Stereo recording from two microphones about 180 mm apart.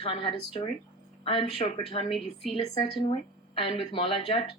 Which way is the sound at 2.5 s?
30° left (ahead or behind).